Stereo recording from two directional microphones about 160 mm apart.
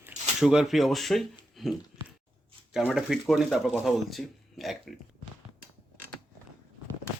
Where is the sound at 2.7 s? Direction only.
5° right (ahead or behind).